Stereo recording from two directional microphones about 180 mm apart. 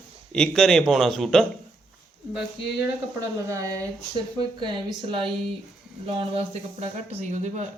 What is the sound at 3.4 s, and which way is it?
Speech, 20° right (ahead or behind).